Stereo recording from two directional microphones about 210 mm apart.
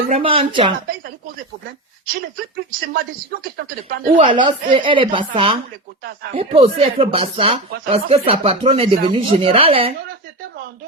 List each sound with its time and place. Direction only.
0.1 s speech: 25° right (ahead or behind)
2.3 s speech: 45° right (ahead or behind)
4.2 s speech: 25° right (ahead or behind)